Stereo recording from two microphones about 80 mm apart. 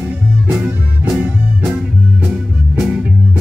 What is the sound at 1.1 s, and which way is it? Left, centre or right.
Music, centre.